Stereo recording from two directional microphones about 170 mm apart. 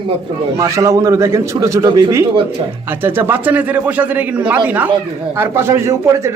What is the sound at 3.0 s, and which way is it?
A man's voice, 10° right (ahead or behind).